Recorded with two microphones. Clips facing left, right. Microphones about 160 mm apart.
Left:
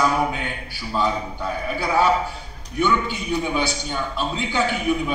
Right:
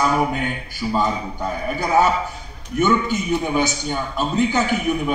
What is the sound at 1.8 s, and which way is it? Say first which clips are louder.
A man's voice: right 2 dB; 45° right (ahead or behind).